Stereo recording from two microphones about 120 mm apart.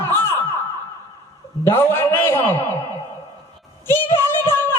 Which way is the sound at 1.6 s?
20° left (ahead or behind).